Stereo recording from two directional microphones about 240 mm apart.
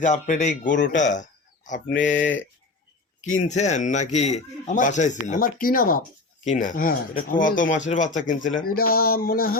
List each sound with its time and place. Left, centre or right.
0.0 s a man's voice: left
1.2 s a sound: left
2.0 s speech: left
3.2 s speech: left